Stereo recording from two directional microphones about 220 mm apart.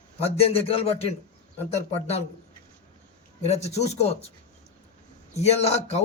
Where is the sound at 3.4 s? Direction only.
30° left (ahead or behind).